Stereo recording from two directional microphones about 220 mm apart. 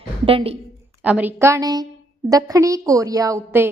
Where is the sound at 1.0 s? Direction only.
5° right (ahead or behind).